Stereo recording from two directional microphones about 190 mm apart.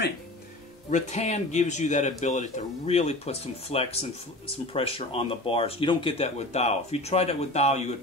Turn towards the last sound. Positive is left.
turn(degrees=35)  # may be behind; listen again after turning